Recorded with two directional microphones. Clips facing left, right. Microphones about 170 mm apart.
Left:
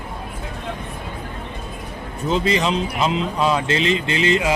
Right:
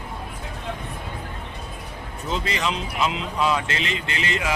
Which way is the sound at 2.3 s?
25° left (ahead or behind).